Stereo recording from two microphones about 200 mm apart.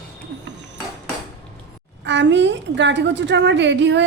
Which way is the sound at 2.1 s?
65° right (ahead or behind).